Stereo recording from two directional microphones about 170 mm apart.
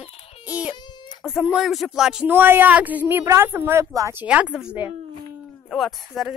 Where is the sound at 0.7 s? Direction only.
25° left (ahead or behind).